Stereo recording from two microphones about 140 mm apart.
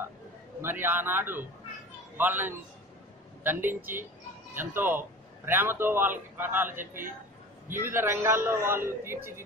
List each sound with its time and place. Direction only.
0.6 s a man's voice: 15° right (ahead or behind)